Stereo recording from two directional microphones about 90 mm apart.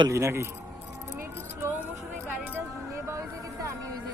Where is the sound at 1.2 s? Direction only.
25° right (ahead or behind).